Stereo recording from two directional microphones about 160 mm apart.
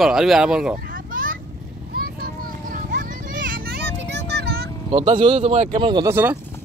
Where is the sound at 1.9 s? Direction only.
70° right (ahead or behind); by 4.6 s 90° right.